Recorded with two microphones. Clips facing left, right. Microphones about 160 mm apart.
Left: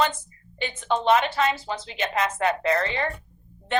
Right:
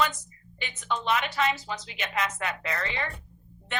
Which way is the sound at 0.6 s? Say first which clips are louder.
Left 7 dB; 30° left (ahead or behind).